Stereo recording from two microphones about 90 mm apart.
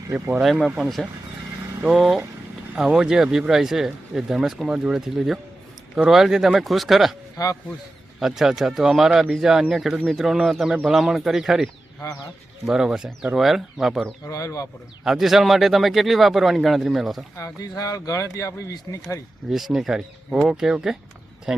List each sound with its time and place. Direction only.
0.5 s speech: 5° right (ahead or behind)
7.4 s speech: 40° left (ahead or behind)
8.2 s speech: 5° right (ahead or behind)
14.3 s speech: 35° left (ahead or behind)
15.0 s speech: 5° right (ahead or behind)
17.3 s speech: 40° left (ahead or behind)
19.5 s speech: 5° right (ahead or behind)